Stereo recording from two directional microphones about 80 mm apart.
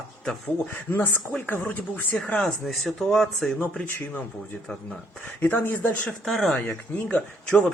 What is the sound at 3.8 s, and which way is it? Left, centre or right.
Speech, left.